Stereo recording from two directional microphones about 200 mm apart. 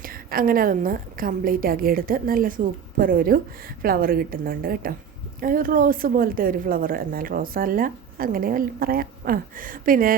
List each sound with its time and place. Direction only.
0.0 s a woman's voice: 45° right (ahead or behind)